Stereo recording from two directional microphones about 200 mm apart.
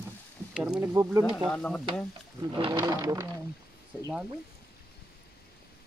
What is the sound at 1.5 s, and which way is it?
Speech, 5° left (ahead or behind).